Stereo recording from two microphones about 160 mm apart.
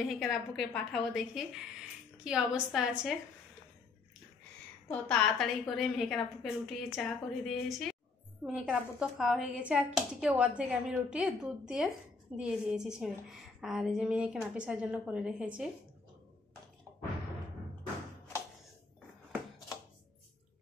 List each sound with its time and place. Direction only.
0.1 s a woman's voice: centre (ahead or behind)
4.8 s a woman's voice: 5° left (ahead or behind)